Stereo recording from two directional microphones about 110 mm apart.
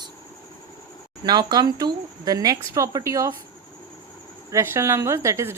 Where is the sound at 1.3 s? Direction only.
40° right (ahead or behind).